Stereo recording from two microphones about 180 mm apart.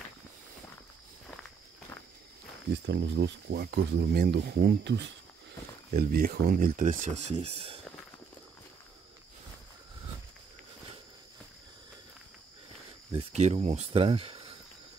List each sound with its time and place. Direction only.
2.9 s speech: 80° right
5.9 s speech: 55° right (ahead or behind); by 7.8 s 35° right (ahead or behind)
13.1 s speech: 35° right (ahead or behind)